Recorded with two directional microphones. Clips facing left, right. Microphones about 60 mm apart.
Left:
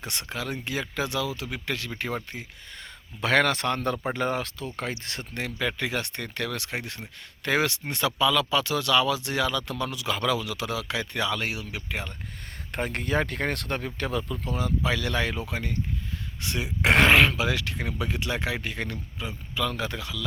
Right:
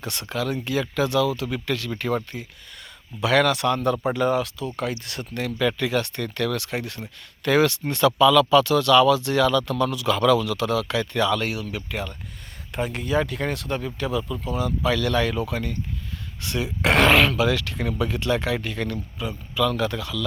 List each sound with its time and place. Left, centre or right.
0.0 s speech: left
3.2 s speech: left
12.7 s speech: left
14.4 s speech: left